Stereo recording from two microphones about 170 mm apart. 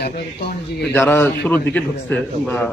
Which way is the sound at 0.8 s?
5° left (ahead or behind).